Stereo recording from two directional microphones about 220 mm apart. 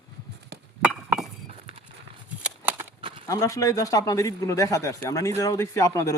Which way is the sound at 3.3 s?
15° left (ahead or behind).